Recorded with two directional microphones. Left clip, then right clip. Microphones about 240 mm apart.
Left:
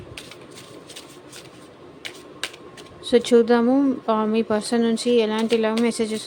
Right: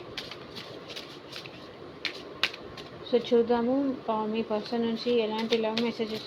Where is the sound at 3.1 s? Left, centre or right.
Left.